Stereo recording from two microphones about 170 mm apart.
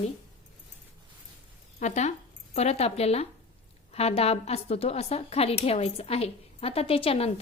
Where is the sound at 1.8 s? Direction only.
45° left (ahead or behind).